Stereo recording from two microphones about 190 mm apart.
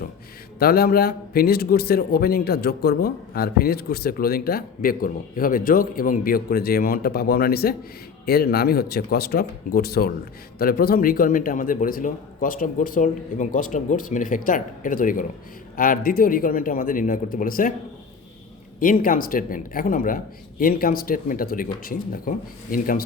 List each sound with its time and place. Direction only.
0.6 s a man's voice: 50° left (ahead or behind)
18.8 s a man's voice: 45° left (ahead or behind)